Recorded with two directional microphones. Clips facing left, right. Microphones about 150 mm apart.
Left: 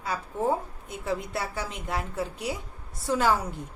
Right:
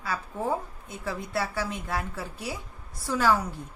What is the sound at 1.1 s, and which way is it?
A woman's voice, 20° left (ahead or behind).